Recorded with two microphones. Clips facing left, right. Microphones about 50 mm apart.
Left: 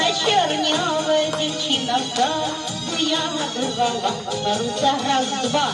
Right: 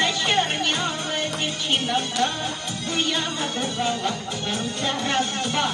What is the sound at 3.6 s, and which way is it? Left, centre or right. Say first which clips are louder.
Music: left 5 dB; right.